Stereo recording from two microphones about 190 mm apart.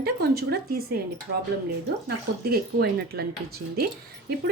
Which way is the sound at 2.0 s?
55° right (ahead or behind).